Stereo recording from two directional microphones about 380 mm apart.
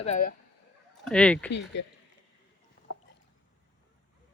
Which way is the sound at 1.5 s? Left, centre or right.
Left.